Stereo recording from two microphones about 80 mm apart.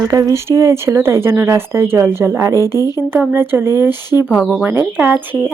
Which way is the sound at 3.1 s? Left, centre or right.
Right.